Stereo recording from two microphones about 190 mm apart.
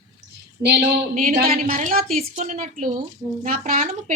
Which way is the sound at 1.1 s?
40° right (ahead or behind).